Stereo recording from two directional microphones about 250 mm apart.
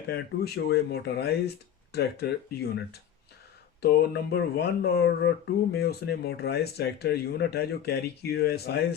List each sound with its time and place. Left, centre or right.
0.1 s speech: left